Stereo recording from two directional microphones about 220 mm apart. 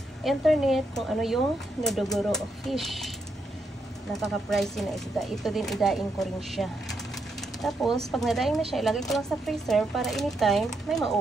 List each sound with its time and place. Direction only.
0.2 s speech: centre (ahead or behind)
4.1 s speech: centre (ahead or behind)